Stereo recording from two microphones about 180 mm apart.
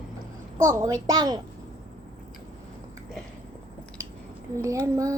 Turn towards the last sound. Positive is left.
turn(degrees=-15)  # may be behind; listen again after turning